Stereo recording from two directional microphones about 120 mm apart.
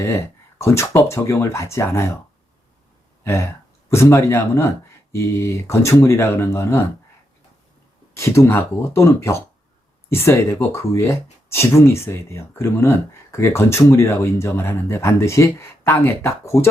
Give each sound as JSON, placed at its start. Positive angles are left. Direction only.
{"t": 0.0, "sound": "speech", "side_deg": 25}
{"t": 3.2, "sound": "speech", "side_deg": 20}
{"t": 8.1, "sound": "speech", "side_deg": 25}